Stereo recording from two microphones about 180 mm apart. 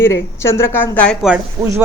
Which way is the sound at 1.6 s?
20° right (ahead or behind).